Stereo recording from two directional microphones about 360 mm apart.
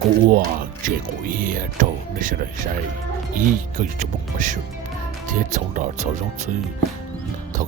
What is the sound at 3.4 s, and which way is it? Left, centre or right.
Speech, right.